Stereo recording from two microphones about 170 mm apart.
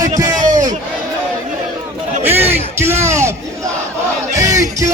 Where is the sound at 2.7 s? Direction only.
15° right (ahead or behind).